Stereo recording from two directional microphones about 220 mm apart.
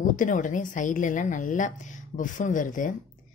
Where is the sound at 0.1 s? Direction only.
35° left (ahead or behind).